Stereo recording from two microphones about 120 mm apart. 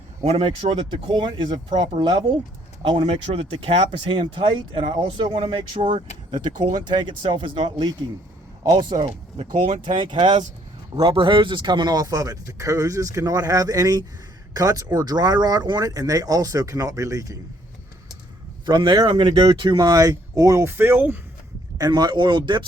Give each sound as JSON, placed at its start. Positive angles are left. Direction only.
{"t": 0.3, "sound": "speech", "side_deg": -55}
{"t": 8.6, "sound": "speech", "side_deg": -35}
{"t": 9.0, "sound": "speech", "side_deg": -50}
{"t": 18.6, "sound": "speech", "side_deg": -40}
{"t": 21.8, "sound": "speech", "side_deg": -35}